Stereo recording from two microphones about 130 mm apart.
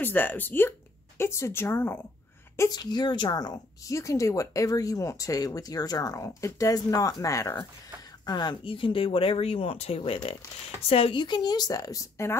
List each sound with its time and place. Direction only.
0.0 s speech: 15° left (ahead or behind)
2.8 s a woman's voice: 35° left (ahead or behind)